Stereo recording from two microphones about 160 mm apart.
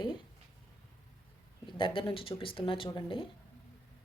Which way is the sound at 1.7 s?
30° left (ahead or behind).